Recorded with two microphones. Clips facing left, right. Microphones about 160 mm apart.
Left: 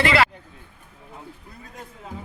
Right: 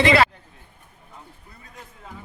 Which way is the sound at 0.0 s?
20° right (ahead or behind).